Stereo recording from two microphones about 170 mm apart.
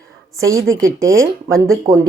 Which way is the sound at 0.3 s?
20° right (ahead or behind).